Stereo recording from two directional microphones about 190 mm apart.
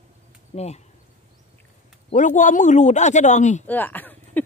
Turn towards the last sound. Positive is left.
turn(degrees=10)  # may be behind; listen again after turning